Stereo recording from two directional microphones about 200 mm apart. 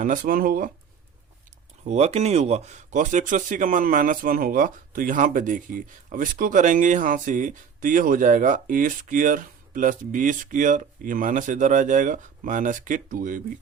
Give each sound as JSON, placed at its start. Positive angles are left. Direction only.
{"t": 0.0, "sound": "speech", "side_deg": -45}
{"t": 1.8, "sound": "speech", "side_deg": -35}